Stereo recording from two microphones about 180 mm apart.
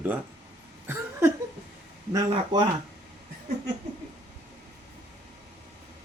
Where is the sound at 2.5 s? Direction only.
25° right (ahead or behind).